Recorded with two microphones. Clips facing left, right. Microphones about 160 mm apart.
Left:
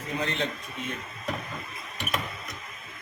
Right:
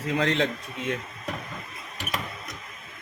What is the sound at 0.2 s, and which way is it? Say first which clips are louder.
Speech: right 6 dB; 90° right.